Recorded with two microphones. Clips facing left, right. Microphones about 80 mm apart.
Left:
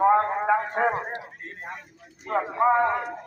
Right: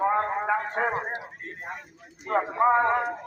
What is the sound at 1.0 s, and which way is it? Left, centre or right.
Speech, centre.